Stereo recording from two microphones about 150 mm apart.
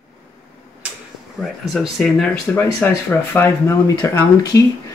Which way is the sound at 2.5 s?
15° left (ahead or behind).